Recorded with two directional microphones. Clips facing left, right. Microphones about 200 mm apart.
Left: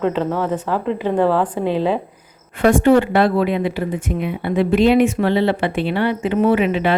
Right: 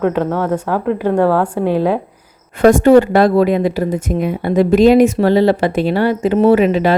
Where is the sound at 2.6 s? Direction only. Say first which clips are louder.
Right 5 dB; 40° right (ahead or behind).